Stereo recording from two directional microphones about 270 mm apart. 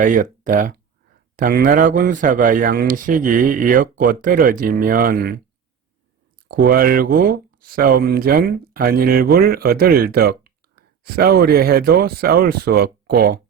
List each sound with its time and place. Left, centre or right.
0.0 s speech: right
6.6 s speech: right